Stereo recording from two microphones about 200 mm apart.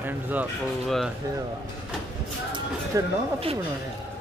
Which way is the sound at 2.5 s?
20° right (ahead or behind).